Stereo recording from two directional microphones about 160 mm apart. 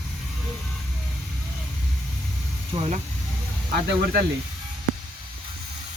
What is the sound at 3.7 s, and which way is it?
Speech, 80° right.